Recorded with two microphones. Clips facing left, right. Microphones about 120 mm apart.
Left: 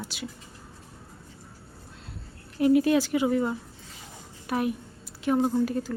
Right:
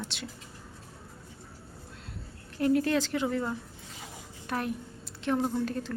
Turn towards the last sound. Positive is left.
turn(degrees=10)  # may be behind; listen again after turning